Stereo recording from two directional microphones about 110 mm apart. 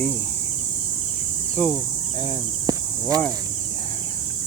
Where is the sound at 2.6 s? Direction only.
35° right (ahead or behind).